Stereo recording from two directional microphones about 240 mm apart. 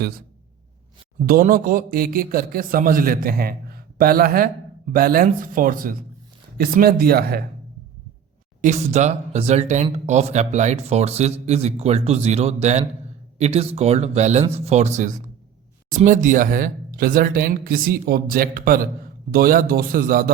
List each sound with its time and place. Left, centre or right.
1.2 s speech: right
8.6 s speech: right